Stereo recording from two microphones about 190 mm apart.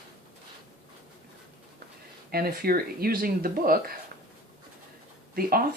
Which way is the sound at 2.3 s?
50° right (ahead or behind).